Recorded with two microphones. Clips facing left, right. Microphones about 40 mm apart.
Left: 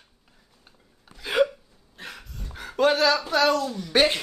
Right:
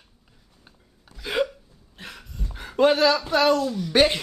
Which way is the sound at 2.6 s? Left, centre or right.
Centre.